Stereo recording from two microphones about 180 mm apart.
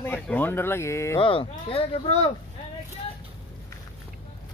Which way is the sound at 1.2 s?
30° left (ahead or behind).